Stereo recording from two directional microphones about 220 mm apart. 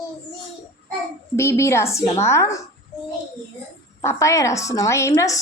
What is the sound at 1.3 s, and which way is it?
A woman's voice, 10° left (ahead or behind).